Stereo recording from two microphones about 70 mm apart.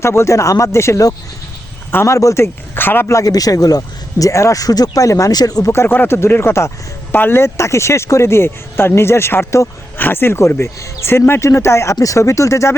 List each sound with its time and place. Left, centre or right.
0.0 s speech: left
2.0 s speech: left
3.1 s speech: left
5.3 s speech: left
5.7 s speech: left
7.1 s speech: left
11.9 s speech: left